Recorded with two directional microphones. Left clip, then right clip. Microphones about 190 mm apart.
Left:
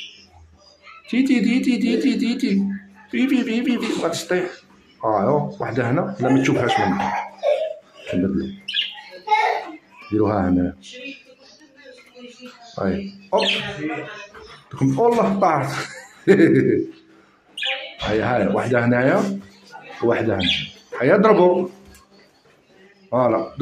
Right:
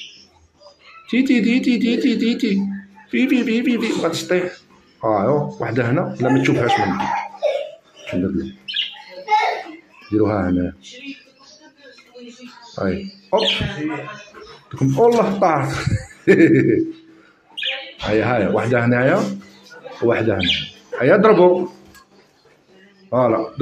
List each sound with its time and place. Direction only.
1.0 s speech: centre (ahead or behind)
9.3 s a sound: centre (ahead or behind)
10.1 s speech: 5° left (ahead or behind)
12.4 s speech: centre (ahead or behind)
17.9 s speech: centre (ahead or behind)
19.7 s a sound: centre (ahead or behind)
20.5 s speech: centre (ahead or behind)
23.0 s a man's voice: centre (ahead or behind)